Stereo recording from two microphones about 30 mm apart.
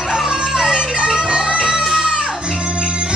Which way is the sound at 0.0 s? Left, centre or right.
Right.